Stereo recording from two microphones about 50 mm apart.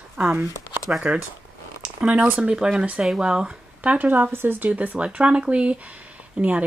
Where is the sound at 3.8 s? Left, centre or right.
Right.